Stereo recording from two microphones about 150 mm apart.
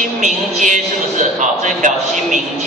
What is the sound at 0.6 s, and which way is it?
A man's voice, 55° right (ahead or behind).